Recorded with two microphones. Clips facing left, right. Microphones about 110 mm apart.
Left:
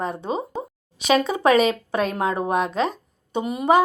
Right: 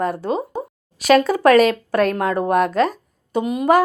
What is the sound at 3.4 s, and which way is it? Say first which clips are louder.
Speech: right 4 dB; centre (ahead or behind).